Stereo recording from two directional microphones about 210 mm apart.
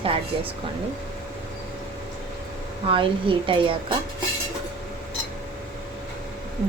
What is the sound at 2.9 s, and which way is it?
A woman's voice, 25° right (ahead or behind).